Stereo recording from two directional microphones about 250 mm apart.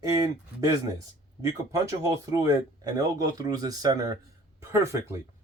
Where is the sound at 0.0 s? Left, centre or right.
Centre.